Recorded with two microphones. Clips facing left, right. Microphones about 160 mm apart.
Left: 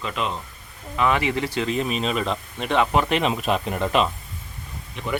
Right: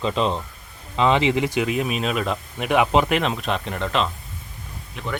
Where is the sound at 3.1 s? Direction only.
Centre (ahead or behind).